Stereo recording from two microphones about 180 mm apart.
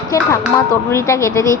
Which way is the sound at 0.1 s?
20° left (ahead or behind).